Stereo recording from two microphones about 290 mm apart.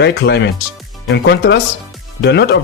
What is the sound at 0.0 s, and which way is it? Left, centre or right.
Speech, left.